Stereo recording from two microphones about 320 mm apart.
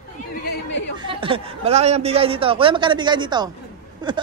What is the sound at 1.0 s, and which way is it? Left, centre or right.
Speech, centre.